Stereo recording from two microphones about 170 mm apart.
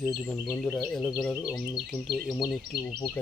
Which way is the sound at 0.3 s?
10° left (ahead or behind).